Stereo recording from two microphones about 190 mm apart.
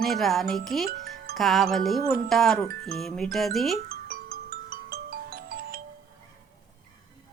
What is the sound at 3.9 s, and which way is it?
Music, 50° right (ahead or behind).